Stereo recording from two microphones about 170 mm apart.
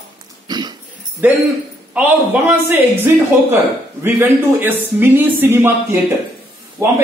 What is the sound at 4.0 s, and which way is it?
A man's voice, 10° right (ahead or behind).